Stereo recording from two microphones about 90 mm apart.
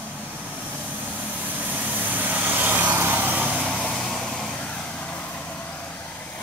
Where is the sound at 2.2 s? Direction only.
20° right (ahead or behind).